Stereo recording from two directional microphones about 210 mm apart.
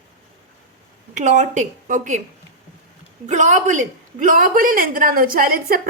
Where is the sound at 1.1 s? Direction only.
35° right (ahead or behind).